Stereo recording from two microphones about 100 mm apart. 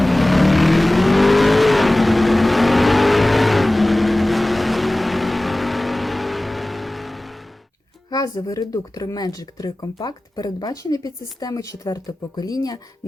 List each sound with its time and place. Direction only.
0.0 s vehicle: centre (ahead or behind)
8.1 s speech: 40° left (ahead or behind)